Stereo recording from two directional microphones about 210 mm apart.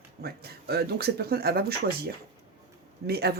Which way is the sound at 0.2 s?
45° right (ahead or behind).